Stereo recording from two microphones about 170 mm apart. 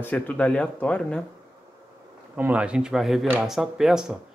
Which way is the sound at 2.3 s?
10° right (ahead or behind).